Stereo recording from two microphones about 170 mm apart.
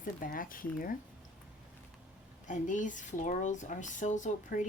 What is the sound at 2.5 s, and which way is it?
Speech, 50° left (ahead or behind).